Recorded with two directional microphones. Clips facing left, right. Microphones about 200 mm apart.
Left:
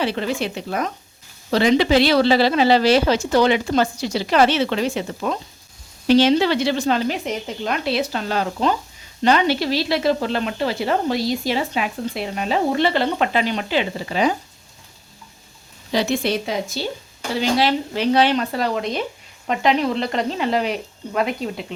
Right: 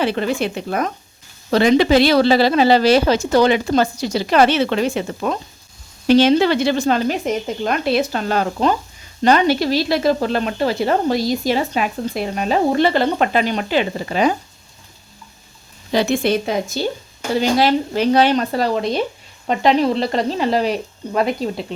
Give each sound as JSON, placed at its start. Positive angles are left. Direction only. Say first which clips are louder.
{"t": 0.0, "sound": "speech", "louder": "right 3 dB", "side_deg": -55}
{"t": 15.9, "sound": "speech", "louder": "right 3 dB", "side_deg": -55}